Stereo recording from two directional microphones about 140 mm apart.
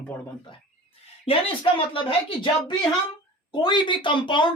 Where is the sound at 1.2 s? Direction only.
40° left (ahead or behind).